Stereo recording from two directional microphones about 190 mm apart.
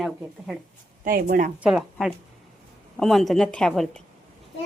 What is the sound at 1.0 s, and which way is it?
Speech, 45° right (ahead or behind).